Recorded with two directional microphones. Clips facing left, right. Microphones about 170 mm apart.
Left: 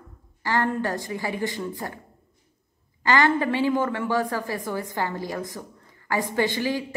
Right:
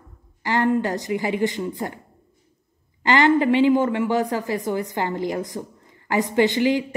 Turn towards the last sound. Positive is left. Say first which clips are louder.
# right 6 dB
turn(degrees=-20)  # may be behind; listen again after turning